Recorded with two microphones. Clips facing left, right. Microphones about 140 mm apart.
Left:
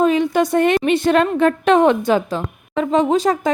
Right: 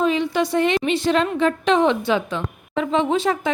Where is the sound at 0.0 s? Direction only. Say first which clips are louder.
Left 4 dB; 50° left (ahead or behind).